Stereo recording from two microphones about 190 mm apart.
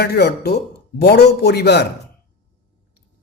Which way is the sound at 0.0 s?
60° left (ahead or behind).